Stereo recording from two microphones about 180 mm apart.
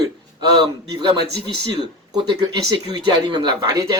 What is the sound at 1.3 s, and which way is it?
Speech, 65° right (ahead or behind).